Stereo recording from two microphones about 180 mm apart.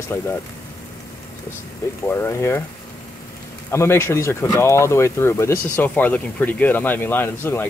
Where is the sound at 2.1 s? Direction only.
15° left (ahead or behind).